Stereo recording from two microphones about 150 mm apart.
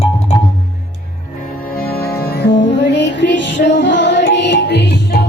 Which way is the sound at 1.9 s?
90° left.